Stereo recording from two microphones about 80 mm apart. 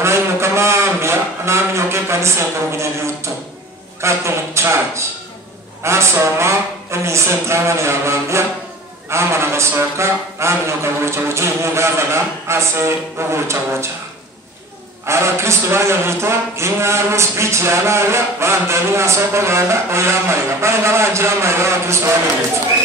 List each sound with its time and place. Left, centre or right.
0.0 s a sound: right
4.0 s a man's voice: right
15.0 s a man's voice: right